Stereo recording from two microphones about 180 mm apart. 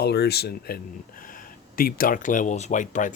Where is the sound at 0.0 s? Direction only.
65° left (ahead or behind).